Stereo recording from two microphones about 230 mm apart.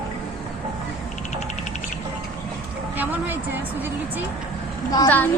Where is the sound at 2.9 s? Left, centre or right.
Centre.